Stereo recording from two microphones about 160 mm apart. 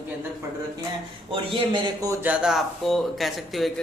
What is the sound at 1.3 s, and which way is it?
Speech, 30° right (ahead or behind).